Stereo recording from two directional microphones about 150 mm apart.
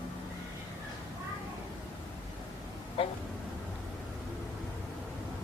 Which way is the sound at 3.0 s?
40° left (ahead or behind).